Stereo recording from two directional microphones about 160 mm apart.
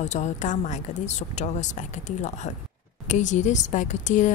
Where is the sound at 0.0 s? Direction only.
45° left (ahead or behind).